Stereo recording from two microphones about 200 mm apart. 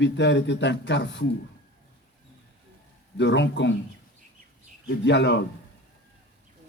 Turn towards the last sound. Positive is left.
turn(degrees=60)  # may be behind; listen again after turning